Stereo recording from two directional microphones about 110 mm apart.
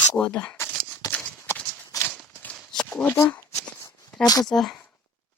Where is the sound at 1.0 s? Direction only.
35° left (ahead or behind).